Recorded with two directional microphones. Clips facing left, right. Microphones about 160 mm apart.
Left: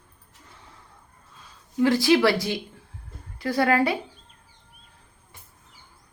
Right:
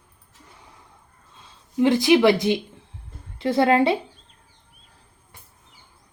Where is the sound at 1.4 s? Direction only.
20° right (ahead or behind).